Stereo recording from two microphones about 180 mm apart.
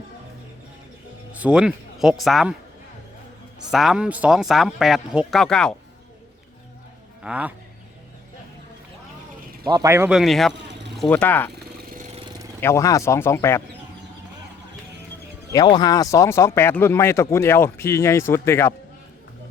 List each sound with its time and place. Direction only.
1.3 s speech: 5° right (ahead or behind)
3.7 s speech: centre (ahead or behind)
7.2 s speech: 5° right (ahead or behind)
9.6 s speech: 20° right (ahead or behind)
10.1 s speech: centre (ahead or behind)
10.7 s a sound: 80° right
10.9 s speech: 5° left (ahead or behind)
12.5 s speech: 15° left (ahead or behind)
15.5 s speech: 25° left (ahead or behind)